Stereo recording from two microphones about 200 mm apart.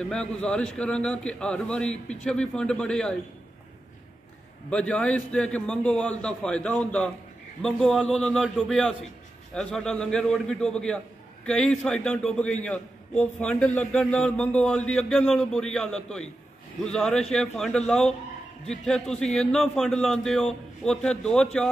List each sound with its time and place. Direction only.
0.0 s a man's voice: 5° left (ahead or behind)
4.6 s a man's voice: 5° left (ahead or behind)